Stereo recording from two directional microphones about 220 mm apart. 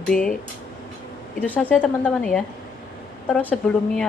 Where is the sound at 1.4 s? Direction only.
5° left (ahead or behind).